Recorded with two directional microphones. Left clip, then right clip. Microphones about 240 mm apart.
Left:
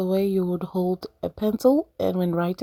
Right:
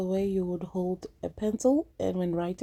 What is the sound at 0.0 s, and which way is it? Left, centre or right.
Speech, left.